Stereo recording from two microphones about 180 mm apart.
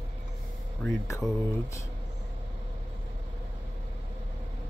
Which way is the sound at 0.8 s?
15° left (ahead or behind).